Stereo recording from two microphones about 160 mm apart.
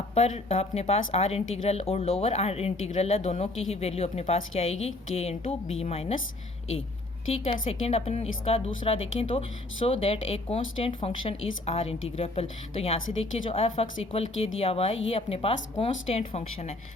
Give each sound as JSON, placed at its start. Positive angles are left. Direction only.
{"t": 0.1, "sound": "speech", "side_deg": 40}
{"t": 7.4, "sound": "speech", "side_deg": 40}